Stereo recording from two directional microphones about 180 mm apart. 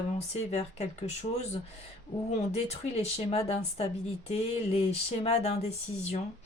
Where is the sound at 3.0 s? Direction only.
35° left (ahead or behind).